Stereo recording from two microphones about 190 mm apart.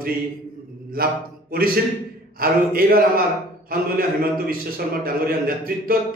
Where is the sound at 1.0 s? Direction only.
50° right (ahead or behind).